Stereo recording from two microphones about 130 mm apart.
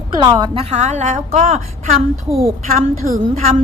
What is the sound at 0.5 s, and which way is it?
A woman's voice, 55° right (ahead or behind).